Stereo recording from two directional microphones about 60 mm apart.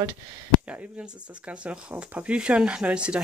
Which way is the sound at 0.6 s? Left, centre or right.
Right.